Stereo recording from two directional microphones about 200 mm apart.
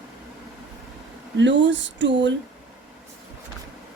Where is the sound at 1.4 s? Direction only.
65° right (ahead or behind).